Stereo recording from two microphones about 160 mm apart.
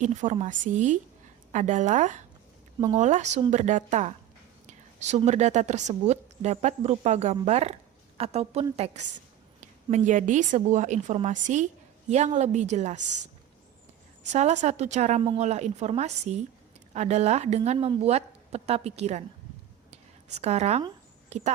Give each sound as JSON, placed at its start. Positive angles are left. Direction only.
{"t": 0.0, "sound": "a woman's voice", "side_deg": -50}
{"t": 14.3, "sound": "a woman's voice", "side_deg": -45}
{"t": 19.9, "sound": "a sound", "side_deg": -40}